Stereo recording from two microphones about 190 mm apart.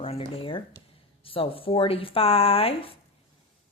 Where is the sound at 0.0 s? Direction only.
30° left (ahead or behind).